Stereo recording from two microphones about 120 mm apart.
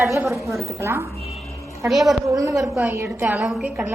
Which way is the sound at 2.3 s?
25° right (ahead or behind).